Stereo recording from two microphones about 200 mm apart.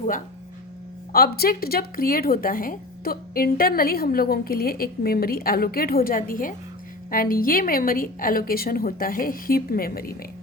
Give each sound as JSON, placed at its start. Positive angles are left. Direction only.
{"t": 1.1, "sound": "speech", "side_deg": 50}